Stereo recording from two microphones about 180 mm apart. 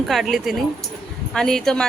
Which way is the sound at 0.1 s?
Centre (ahead or behind).